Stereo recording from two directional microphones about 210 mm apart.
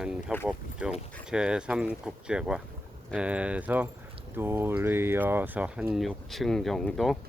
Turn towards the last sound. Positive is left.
turn(degrees=0)  # may be behind; listen again after turning